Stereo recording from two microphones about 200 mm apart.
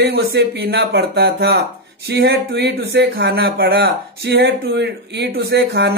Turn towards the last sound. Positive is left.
turn(degrees=-55)  # may be behind; listen again after turning